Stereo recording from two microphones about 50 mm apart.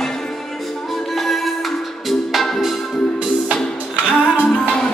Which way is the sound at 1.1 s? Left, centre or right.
Centre.